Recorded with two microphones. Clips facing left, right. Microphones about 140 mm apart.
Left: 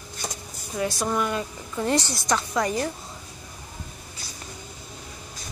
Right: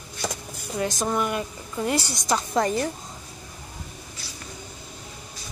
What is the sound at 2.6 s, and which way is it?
Speech, 30° right (ahead or behind).